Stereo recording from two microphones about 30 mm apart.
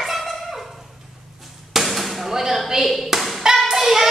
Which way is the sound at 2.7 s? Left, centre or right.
Centre.